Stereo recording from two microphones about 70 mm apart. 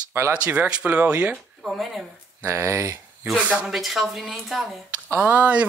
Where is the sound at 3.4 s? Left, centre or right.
Right.